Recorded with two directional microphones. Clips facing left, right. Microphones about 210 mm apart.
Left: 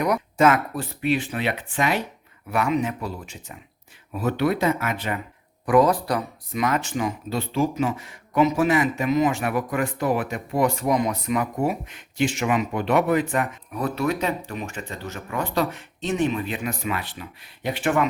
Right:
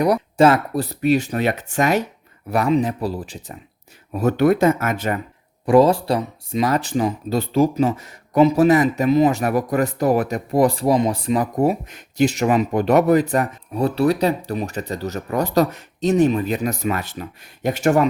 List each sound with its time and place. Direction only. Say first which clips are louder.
0.0 s speech: right 4 dB; 35° right (ahead or behind)
5.6 s speech: right 4 dB; 25° right (ahead or behind)